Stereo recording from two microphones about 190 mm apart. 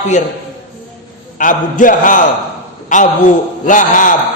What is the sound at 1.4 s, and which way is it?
A man's voice, 45° left (ahead or behind).